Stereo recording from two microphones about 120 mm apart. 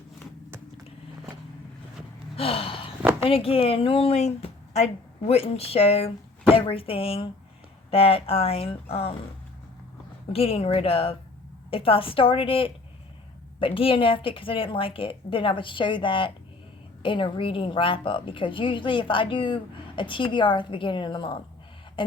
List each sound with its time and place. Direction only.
2.3 s gasp: 50° left (ahead or behind)
3.2 s a woman's voice: 50° left (ahead or behind)
10.3 s a woman's voice: 55° left (ahead or behind)
22.0 s a sound: 45° left (ahead or behind)